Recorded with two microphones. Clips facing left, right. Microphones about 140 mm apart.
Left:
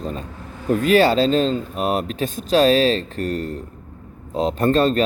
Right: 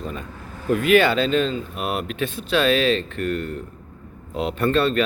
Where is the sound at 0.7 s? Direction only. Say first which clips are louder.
Left 2 dB; 35° left (ahead or behind).